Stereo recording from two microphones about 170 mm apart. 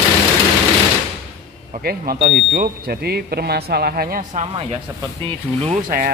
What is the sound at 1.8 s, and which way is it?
Speech, 65° right (ahead or behind).